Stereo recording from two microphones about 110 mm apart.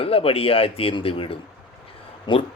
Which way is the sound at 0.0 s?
60° left (ahead or behind).